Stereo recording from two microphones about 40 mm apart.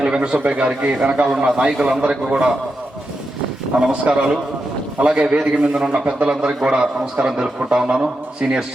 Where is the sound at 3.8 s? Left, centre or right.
Centre.